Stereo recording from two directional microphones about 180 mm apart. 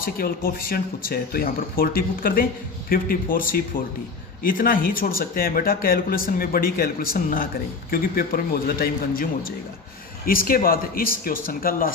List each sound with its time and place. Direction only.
0.0 s speech: 55° left (ahead or behind)